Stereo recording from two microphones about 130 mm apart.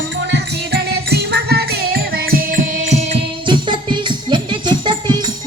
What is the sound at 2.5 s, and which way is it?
Music, 65° right (ahead or behind).